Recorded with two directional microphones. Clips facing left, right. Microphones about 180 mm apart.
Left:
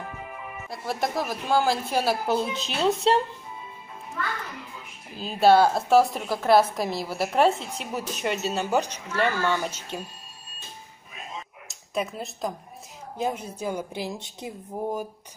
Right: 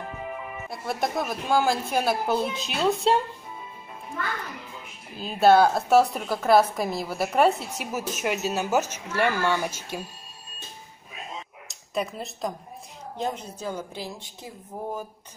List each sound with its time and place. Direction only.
0.7 s a woman's voice: centre (ahead or behind)
5.1 s a woman's voice: centre (ahead or behind)
11.6 s a sound: centre (ahead or behind)
13.2 s a woman's voice: 10° left (ahead or behind)